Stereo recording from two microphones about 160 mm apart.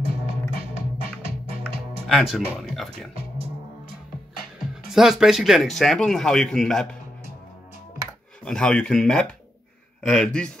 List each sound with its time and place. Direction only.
0.7 s music: 40° right (ahead or behind)
2.0 s speech: centre (ahead or behind)
4.9 s a man's voice: 5° right (ahead or behind)
8.0 s a sound: 20° right (ahead or behind)
8.5 s a man's voice: 5° left (ahead or behind)